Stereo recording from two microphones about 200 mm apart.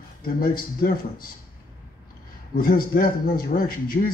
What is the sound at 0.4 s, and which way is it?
Speech, 45° left (ahead or behind).